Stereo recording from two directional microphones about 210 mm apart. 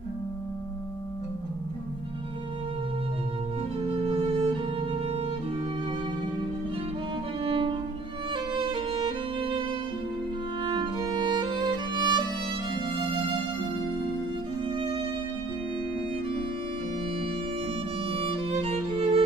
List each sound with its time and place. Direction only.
3.9 s music: 25° right (ahead or behind)
7.4 s music: 25° right (ahead or behind)
10.6 s music: 20° right (ahead or behind)
18.0 s music: 25° right (ahead or behind)